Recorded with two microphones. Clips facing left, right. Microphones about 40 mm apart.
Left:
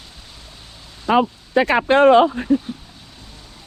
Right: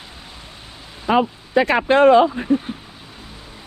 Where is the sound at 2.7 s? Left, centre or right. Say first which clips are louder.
Right 1 dB; right.